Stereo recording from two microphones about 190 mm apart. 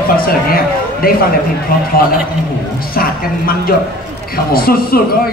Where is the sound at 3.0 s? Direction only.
50° left (ahead or behind).